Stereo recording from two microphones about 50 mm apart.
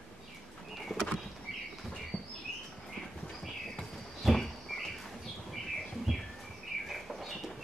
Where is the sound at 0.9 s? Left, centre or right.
Centre.